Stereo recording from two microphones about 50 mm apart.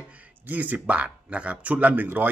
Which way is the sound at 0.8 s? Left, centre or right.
Right.